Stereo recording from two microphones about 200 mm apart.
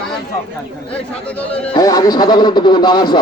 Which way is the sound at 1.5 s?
30° left (ahead or behind).